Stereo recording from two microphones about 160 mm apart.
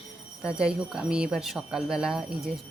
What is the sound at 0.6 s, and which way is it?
Speech, 5° right (ahead or behind).